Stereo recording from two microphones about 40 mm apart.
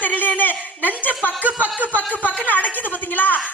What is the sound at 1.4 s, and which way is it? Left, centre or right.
Speech, right.